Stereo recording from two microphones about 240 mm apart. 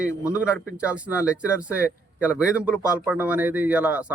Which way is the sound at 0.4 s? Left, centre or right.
Centre.